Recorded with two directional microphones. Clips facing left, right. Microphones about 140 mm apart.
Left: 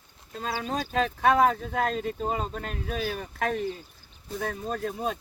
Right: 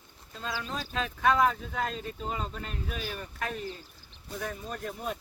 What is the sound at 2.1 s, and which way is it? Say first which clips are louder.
Speech: left 6 dB; 45° left (ahead or behind).